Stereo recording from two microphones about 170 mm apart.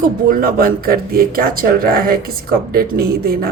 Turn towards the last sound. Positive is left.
turn(degrees=-65)  # may be behind; listen again after turning